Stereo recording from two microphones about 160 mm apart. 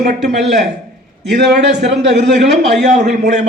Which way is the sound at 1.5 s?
90° right.